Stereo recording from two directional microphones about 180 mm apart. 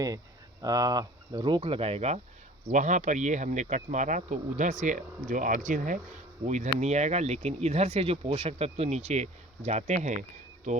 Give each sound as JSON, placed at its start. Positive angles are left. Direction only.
{"t": 0.6, "sound": "speech", "side_deg": -20}